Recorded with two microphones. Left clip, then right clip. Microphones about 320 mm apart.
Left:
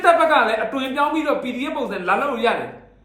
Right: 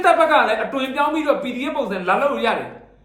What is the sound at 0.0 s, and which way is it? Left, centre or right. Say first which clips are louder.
Speech: even; centre.